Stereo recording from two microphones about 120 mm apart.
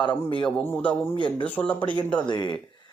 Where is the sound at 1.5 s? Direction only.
10° left (ahead or behind).